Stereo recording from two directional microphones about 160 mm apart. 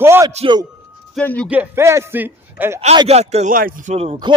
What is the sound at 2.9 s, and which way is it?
Speech, 35° right (ahead or behind).